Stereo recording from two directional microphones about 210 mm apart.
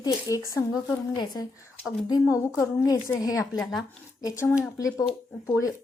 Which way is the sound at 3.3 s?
Centre (ahead or behind).